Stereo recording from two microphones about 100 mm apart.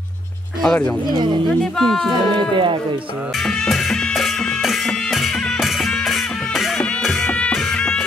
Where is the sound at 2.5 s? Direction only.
55° right (ahead or behind).